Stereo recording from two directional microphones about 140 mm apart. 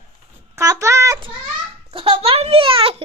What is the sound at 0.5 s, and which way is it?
Speech, 20° right (ahead or behind).